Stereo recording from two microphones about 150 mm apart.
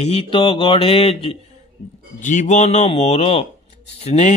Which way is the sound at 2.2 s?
55° left (ahead or behind).